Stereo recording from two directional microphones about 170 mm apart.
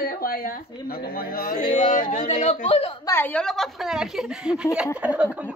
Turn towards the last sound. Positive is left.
turn(degrees=-10)  # may be behind; listen again after turning